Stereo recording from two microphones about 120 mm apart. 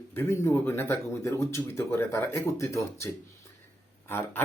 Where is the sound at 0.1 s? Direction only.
20° left (ahead or behind).